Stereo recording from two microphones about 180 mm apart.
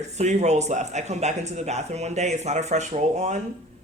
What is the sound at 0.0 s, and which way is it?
Speech, 40° right (ahead or behind).